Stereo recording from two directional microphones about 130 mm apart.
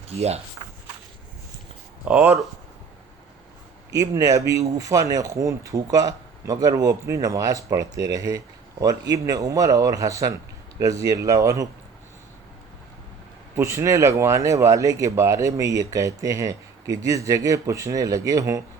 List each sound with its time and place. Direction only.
2.0 s speech: 10° right (ahead or behind)
3.9 s speech: 25° right (ahead or behind)
13.6 s speech: 20° right (ahead or behind)